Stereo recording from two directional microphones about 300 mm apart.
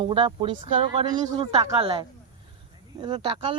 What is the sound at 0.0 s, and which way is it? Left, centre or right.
A man's voice, centre.